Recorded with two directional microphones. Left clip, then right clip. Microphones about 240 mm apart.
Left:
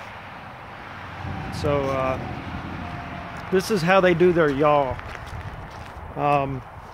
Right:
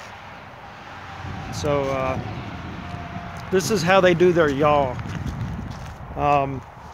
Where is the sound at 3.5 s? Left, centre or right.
Right.